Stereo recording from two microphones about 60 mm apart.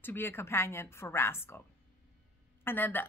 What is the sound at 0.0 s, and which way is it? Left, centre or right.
A woman's voice, left.